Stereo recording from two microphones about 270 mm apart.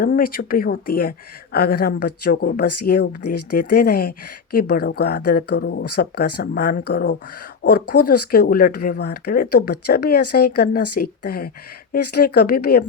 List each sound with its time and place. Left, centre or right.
0.0 s speech: left
3.2 s speech: left
3.6 s speech: left
7.9 s speech: left
8.3 s speech: left